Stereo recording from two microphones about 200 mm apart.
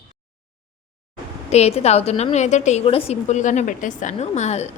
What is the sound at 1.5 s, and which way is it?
A woman's voice, 30° left (ahead or behind).